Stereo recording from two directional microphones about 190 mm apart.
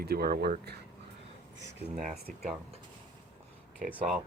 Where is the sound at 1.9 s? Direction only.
40° right (ahead or behind).